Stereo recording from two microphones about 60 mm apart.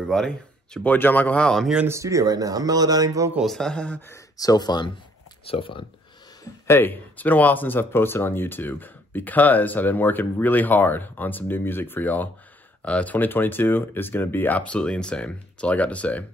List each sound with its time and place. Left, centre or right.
0.0 s speech: centre
0.8 s speech: left
1.9 s speech: right
3.4 s speech: centre
4.4 s speech: left
6.7 s speech: left
14.6 s speech: left